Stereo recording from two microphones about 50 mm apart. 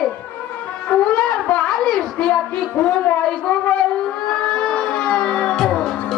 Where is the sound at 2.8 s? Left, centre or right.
Left.